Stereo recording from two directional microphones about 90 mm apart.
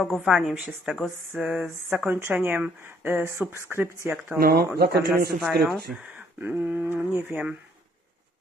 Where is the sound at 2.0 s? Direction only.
25° right (ahead or behind).